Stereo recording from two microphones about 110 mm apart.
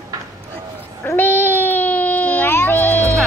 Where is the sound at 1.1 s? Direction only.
20° left (ahead or behind).